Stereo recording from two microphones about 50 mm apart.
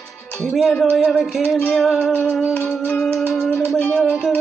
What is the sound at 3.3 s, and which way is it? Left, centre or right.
Music, centre.